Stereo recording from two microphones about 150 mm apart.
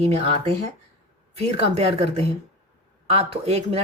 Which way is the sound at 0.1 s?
40° right (ahead or behind).